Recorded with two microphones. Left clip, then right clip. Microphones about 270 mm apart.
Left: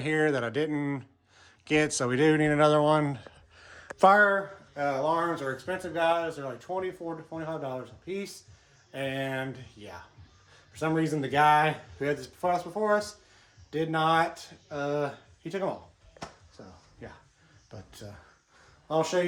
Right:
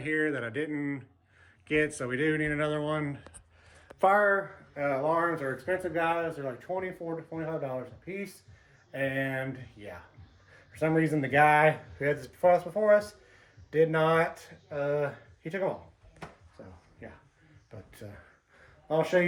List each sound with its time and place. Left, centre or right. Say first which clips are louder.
0.0 s speech: left 3 dB; centre
3.6 s a sound: left 4 dB; left
4.1 s speech: left 3 dB; left